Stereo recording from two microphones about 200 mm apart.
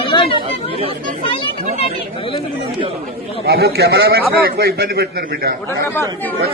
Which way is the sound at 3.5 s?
55° right (ahead or behind).